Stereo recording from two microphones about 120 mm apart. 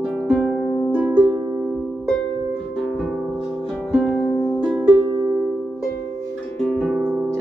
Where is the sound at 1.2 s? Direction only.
30° right (ahead or behind).